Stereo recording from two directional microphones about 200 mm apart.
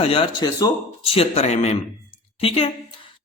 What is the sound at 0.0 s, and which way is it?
A man's voice, 25° left (ahead or behind).